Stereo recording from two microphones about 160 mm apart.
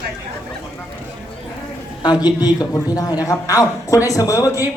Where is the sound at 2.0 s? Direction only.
25° left (ahead or behind).